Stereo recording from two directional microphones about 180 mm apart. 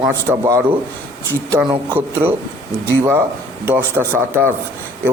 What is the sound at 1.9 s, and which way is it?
A man's voice, 10° right (ahead or behind).